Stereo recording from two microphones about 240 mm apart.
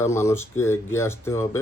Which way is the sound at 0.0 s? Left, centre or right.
Centre.